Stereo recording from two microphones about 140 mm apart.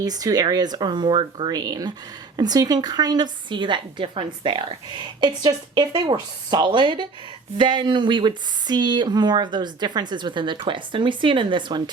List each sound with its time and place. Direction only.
0.0 s a woman's voice: 25° right (ahead or behind)